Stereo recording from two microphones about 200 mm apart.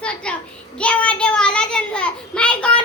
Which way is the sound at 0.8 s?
5° left (ahead or behind).